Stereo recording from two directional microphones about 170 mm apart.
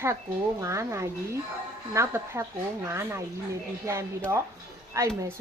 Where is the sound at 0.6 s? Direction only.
15° right (ahead or behind).